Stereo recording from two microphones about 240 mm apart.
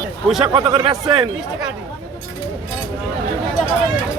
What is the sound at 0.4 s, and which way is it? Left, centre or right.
Speech, right.